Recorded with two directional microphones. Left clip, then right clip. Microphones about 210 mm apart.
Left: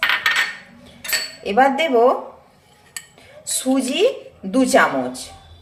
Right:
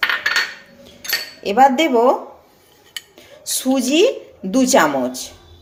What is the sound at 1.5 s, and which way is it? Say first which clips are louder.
Speech: right 3 dB; 30° right (ahead or behind).